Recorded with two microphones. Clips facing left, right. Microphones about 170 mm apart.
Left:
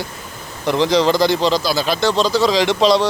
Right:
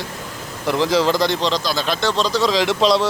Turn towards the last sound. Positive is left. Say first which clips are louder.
# left 2 dB
turn(degrees=0)  # may be behind; listen again after turning